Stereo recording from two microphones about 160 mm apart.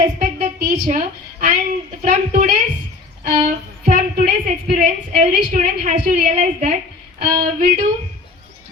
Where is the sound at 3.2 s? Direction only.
50° right (ahead or behind).